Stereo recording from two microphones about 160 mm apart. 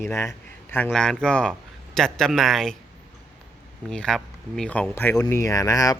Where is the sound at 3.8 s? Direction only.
5° left (ahead or behind); by 6.0 s 20° left (ahead or behind).